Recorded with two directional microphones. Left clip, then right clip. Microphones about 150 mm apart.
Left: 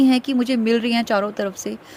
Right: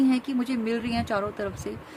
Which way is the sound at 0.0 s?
55° left (ahead or behind).